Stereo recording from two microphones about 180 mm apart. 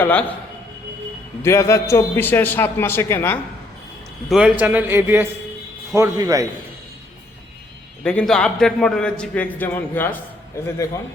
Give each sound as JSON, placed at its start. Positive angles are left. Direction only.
{"t": 0.0, "sound": "a man's voice", "side_deg": 10}
{"t": 1.4, "sound": "a man's voice", "side_deg": 15}
{"t": 4.3, "sound": "a man's voice", "side_deg": -5}
{"t": 8.0, "sound": "a man's voice", "side_deg": 5}